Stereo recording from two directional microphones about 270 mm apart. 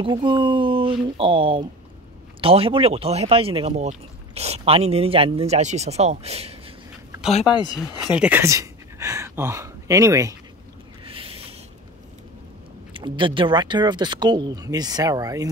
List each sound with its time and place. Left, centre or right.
0.0 s speech: centre
7.7 s speech: centre
11.1 s a sound: centre
12.9 s speech: centre